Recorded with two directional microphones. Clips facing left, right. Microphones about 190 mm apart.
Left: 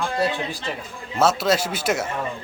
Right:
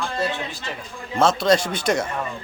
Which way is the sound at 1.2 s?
5° left (ahead or behind).